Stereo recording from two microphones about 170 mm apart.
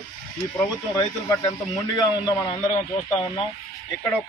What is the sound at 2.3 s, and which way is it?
Speech, 25° left (ahead or behind).